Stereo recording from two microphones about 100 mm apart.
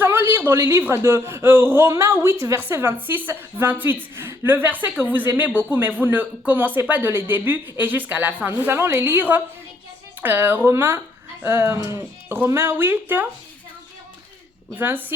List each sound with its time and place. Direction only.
0.0 s a sound: 25° right (ahead or behind)
0.3 s speech: 20° right (ahead or behind)
14.8 s speech: 20° right (ahead or behind)